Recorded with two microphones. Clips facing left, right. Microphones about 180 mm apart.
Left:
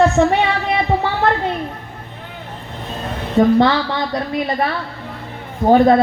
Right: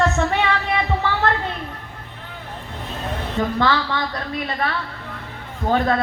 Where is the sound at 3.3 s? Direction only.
20° left (ahead or behind).